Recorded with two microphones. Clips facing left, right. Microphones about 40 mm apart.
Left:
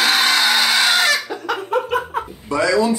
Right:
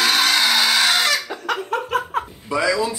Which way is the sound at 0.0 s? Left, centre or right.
Centre.